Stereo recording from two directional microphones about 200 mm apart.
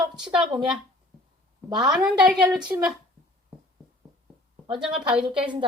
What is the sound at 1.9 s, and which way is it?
A woman's voice, 5° right (ahead or behind).